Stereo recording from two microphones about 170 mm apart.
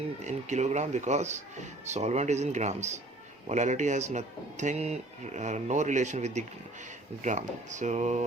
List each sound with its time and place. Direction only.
0.2 s speech: 45° right (ahead or behind)